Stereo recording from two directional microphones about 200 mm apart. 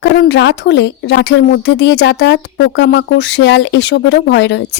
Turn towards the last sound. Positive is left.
turn(degrees=60)  # may be behind; listen again after turning